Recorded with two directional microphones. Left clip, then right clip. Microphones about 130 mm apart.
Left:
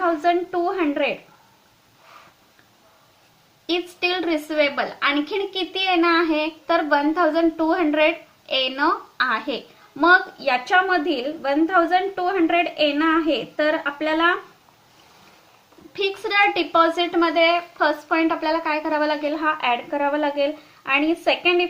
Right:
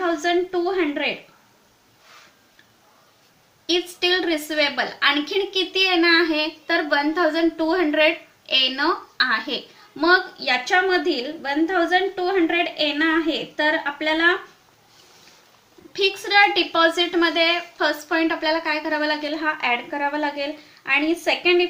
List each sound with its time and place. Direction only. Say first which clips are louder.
0.0 s a woman's voice: left 1 dB; 30° left (ahead or behind)
3.8 s a woman's voice: right 3 dB; 30° left (ahead or behind)
15.9 s a woman's voice: right 3 dB; 30° left (ahead or behind)